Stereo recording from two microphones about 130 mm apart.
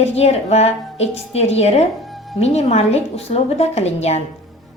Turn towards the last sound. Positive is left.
turn(degrees=55)  # may be behind; listen again after turning